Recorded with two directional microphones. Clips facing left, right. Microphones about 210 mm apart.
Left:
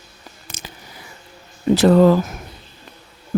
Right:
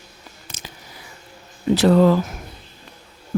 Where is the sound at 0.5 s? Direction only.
55° left (ahead or behind).